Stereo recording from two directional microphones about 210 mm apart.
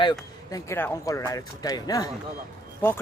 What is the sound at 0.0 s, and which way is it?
Speech, 20° left (ahead or behind).